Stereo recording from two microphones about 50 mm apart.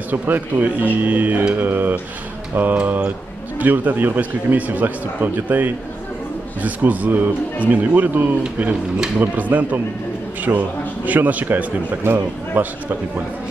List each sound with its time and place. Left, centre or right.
0.1 s a man's voice: right
12.0 s a man's voice: right